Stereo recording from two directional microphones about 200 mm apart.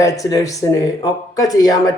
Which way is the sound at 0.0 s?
15° left (ahead or behind).